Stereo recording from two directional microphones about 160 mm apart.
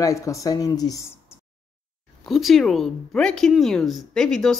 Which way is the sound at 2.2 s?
Centre (ahead or behind).